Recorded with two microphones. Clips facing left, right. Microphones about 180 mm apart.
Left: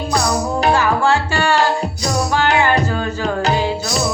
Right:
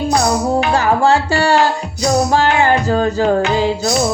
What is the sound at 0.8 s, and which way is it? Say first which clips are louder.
Music: right 3 dB; 40° right (ahead or behind).